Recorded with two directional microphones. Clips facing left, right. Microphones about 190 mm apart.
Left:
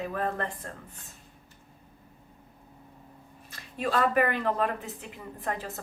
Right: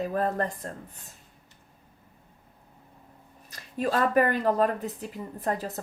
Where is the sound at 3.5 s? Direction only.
40° right (ahead or behind).